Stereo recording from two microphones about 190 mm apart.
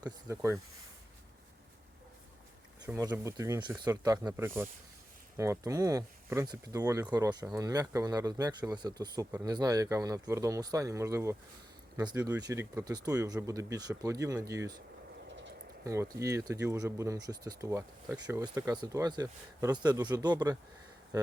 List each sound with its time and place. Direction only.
0.0 s speech: 15° right (ahead or behind)
2.8 s speech: 15° right (ahead or behind)
15.8 s speech: 15° right (ahead or behind)